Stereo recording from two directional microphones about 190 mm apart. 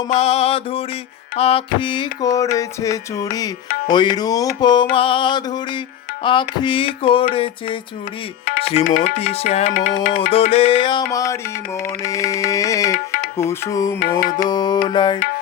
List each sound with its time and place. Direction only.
0.1 s mantra: 35° left (ahead or behind)
1.4 s music: 30° left (ahead or behind)
8.4 s music: 50° left (ahead or behind)
9.1 s mantra: 30° left (ahead or behind)
9.5 s music: 40° left (ahead or behind)
10.5 s music: 30° left (ahead or behind)
14.2 s music: 45° left (ahead or behind)
14.4 s music: 20° left (ahead or behind)